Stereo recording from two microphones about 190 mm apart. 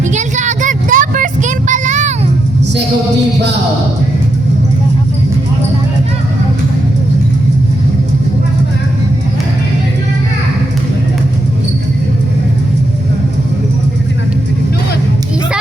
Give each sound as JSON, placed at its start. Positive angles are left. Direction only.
{"t": 0.1, "sound": "vehicle", "side_deg": -40}